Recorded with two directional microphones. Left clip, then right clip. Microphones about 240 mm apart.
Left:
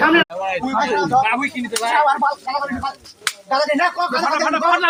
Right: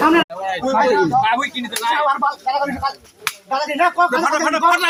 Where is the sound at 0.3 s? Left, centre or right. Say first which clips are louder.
Right 1 dB; centre.